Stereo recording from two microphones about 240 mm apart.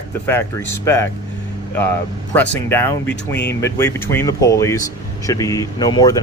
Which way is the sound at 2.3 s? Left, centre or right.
Centre.